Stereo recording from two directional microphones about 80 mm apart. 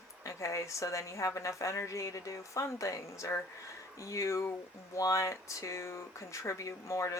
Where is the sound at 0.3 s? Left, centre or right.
Left.